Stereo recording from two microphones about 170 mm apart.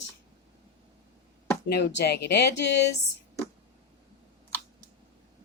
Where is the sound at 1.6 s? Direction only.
75° left (ahead or behind).